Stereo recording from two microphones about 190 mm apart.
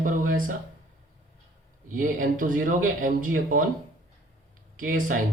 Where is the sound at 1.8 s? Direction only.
45° right (ahead or behind).